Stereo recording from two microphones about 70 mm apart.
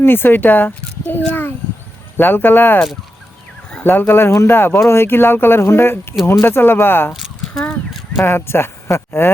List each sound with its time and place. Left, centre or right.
0.0 s speech: left
3.8 s speech: left
7.1 s a sound: centre
8.2 s speech: left